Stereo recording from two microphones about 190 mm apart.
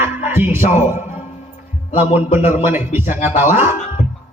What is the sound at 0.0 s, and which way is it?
Music, 10° right (ahead or behind).